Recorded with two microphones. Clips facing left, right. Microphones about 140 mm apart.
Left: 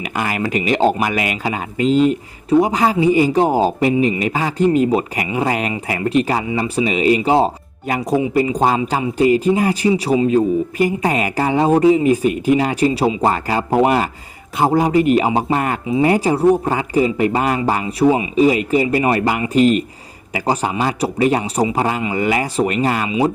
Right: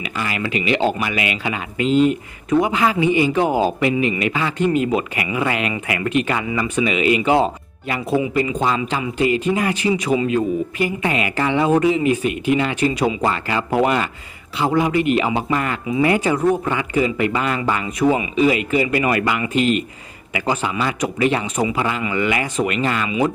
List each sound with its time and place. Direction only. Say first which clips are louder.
0.0 s speech: left 4 dB; 45° left (ahead or behind)
23.0 s speech: left 2 dB; 25° left (ahead or behind)